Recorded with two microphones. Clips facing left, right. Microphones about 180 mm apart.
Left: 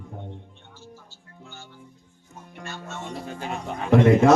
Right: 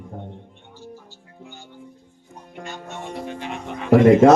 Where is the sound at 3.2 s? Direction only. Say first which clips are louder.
Right 2 dB; 40° left (ahead or behind).